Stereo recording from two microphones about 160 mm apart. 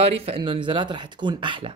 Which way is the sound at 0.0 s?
40° right (ahead or behind).